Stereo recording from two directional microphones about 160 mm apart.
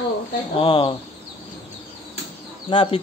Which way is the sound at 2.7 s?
30° left (ahead or behind).